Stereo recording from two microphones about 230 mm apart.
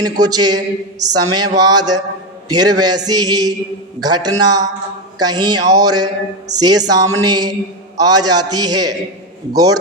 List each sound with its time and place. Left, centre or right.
0.0 s a man's voice: centre